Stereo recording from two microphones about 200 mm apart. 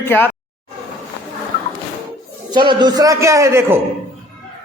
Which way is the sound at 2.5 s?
20° right (ahead or behind).